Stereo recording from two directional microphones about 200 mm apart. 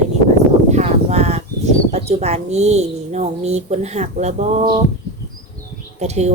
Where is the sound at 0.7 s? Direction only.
35° right (ahead or behind).